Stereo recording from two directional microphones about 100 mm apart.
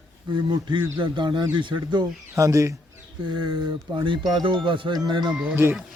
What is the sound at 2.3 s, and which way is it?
Speech, 30° right (ahead or behind).